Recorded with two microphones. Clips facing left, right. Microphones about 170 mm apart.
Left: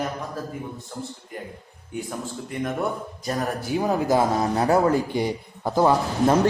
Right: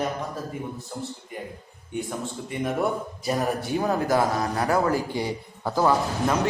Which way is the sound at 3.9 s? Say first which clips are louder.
Left 3 dB; 20° left (ahead or behind).